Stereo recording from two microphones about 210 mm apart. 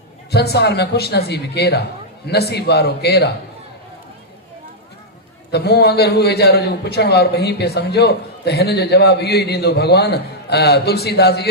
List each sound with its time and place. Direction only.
0.3 s a man's voice: 50° left (ahead or behind)
5.5 s a man's voice: 50° left (ahead or behind)